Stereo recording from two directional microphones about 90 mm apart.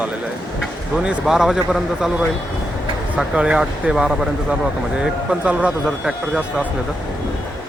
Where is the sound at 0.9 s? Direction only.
5° right (ahead or behind).